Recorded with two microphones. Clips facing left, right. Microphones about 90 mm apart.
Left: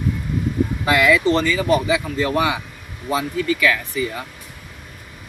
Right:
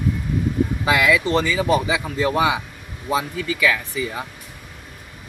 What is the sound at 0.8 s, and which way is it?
Speech, 5° right (ahead or behind).